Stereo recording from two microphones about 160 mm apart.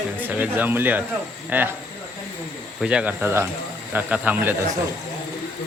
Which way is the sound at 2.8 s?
5° right (ahead or behind).